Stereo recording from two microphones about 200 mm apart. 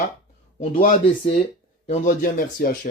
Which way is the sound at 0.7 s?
45° left (ahead or behind).